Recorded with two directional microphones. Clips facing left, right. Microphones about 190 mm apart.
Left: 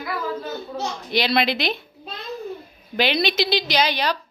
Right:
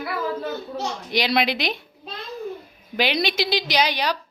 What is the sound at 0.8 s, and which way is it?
A woman's voice, 15° right (ahead or behind).